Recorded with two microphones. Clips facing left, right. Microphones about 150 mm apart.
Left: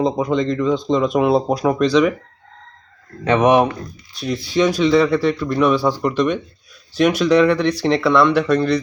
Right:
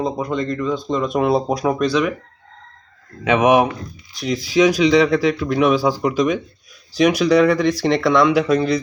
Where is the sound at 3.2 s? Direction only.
5° right (ahead or behind).